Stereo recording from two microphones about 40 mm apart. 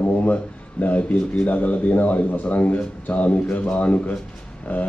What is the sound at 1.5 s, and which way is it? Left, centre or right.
Speech, left.